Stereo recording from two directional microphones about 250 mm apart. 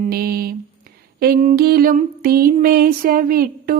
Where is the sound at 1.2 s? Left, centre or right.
Right.